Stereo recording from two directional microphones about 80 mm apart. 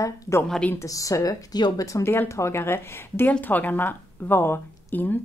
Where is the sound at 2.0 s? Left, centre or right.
Left.